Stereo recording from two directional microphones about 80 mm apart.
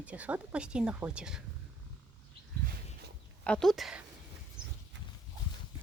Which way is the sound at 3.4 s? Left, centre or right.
Centre.